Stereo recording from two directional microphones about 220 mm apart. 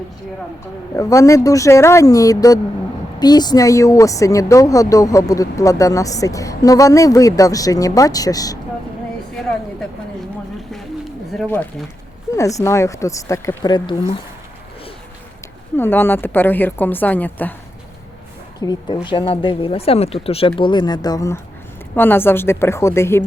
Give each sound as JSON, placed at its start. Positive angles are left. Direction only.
{"t": 0.9, "sound": "a woman's voice", "side_deg": 15}
{"t": 11.3, "sound": "a woman's voice", "side_deg": 10}
{"t": 15.7, "sound": "a woman's voice", "side_deg": 10}
{"t": 18.6, "sound": "a woman's voice", "side_deg": 20}